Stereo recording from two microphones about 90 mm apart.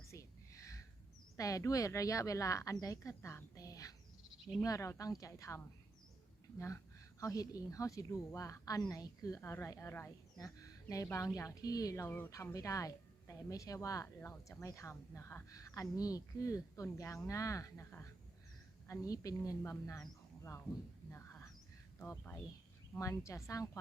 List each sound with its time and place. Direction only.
0.1 s whispering: 35° left (ahead or behind)
1.4 s speech: 40° left (ahead or behind)
7.2 s speech: 40° left (ahead or behind)
9.4 s speech: 30° left (ahead or behind)
10.3 s speech: 40° left (ahead or behind)
12.0 s speech: 20° left (ahead or behind)
12.5 s speech: 40° left (ahead or behind)
18.9 s speech: 40° left (ahead or behind)
21.1 s a sound: 25° left (ahead or behind)
21.9 s speech: 25° left (ahead or behind)
23.0 s speech: 35° left (ahead or behind)